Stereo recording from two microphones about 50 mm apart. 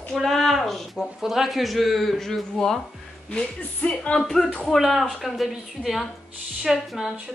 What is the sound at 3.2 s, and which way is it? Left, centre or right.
Speech, left.